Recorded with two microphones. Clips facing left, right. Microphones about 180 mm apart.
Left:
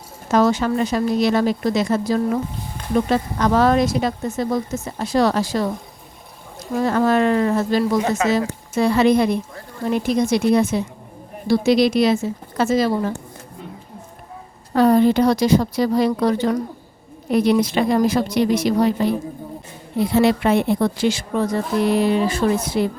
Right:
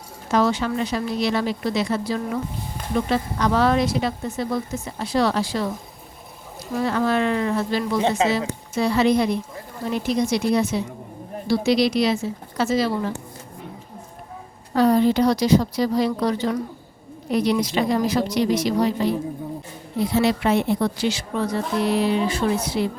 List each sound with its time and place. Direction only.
0.3 s a woman's voice: 45° left (ahead or behind)
6.7 s a woman's voice: 45° left (ahead or behind)
14.7 s a woman's voice: 55° left (ahead or behind)